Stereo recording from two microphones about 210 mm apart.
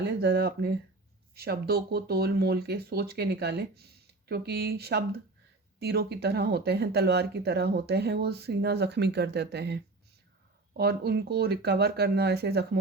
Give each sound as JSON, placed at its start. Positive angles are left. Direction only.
{"t": 0.0, "sound": "speech", "side_deg": -50}